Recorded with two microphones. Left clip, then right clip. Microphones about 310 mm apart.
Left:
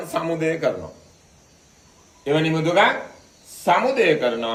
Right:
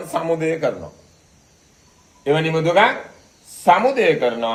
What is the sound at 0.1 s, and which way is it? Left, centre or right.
Speech, centre.